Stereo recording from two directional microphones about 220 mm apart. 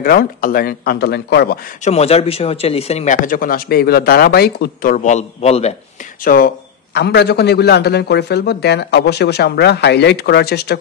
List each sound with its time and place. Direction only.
0.0 s a man's voice: 40° left (ahead or behind)
1.9 s speech: 30° left (ahead or behind)
6.2 s a man's voice: 40° left (ahead or behind)